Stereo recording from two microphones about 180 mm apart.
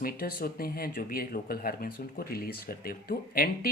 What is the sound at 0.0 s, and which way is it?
Speech, 55° left (ahead or behind).